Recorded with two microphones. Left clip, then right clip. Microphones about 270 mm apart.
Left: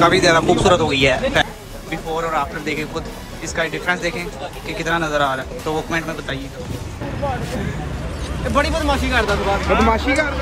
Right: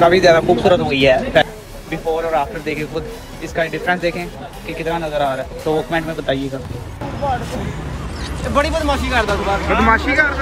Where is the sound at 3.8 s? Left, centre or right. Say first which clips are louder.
Right 2 dB; centre.